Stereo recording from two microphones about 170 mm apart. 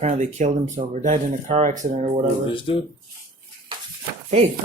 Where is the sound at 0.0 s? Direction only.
40° right (ahead or behind).